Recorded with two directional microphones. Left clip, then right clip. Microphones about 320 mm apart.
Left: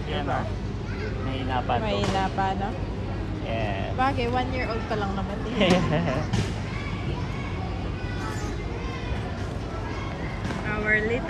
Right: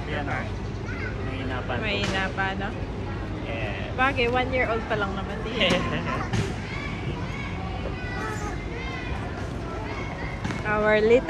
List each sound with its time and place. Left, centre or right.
1.9 s speech: centre
4.0 s speech: centre
5.6 s speech: left
10.7 s speech: centre